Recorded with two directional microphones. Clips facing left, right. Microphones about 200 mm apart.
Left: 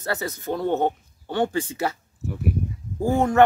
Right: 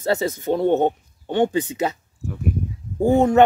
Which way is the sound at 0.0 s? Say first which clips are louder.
Right 7 dB; 25° right (ahead or behind).